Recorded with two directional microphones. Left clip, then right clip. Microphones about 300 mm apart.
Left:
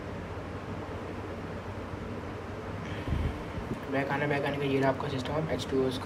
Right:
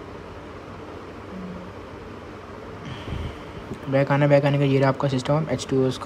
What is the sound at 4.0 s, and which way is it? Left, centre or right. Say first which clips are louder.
A man's voice: right 11 dB; centre.